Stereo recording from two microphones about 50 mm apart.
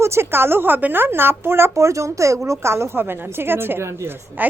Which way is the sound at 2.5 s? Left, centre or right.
Right.